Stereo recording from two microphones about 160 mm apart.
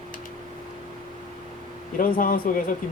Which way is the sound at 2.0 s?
60° left (ahead or behind).